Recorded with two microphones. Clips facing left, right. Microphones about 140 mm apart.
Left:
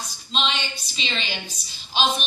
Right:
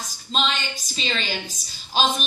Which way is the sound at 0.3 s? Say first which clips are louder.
Right 1 dB; 45° right (ahead or behind).